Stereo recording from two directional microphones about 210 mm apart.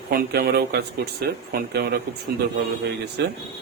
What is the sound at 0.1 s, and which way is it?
Speech, 45° right (ahead or behind).